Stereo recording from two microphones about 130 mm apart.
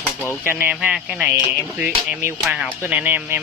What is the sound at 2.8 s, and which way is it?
Speech, 15° right (ahead or behind).